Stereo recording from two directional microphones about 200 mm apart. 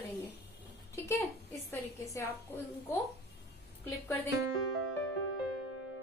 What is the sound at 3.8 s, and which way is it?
Speech, 15° left (ahead or behind).